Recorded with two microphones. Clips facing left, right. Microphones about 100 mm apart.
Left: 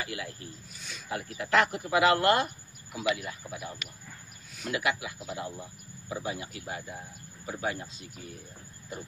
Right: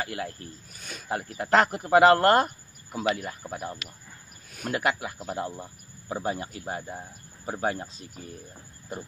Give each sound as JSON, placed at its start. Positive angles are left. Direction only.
{"t": 0.0, "sound": "a man's voice", "side_deg": -40}